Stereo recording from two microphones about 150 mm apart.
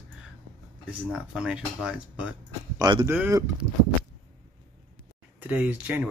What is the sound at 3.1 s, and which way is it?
Speech, 15° right (ahead or behind).